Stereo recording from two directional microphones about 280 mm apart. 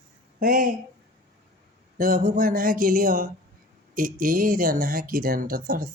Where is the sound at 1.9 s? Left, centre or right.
Right.